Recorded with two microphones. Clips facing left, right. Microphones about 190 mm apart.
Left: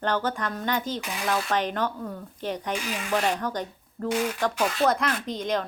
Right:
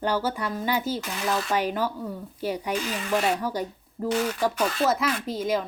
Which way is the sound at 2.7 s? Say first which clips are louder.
Right 2 dB; 10° left (ahead or behind).